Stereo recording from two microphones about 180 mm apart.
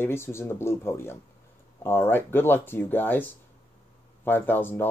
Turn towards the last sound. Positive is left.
turn(degrees=10)  # may be behind; listen again after turning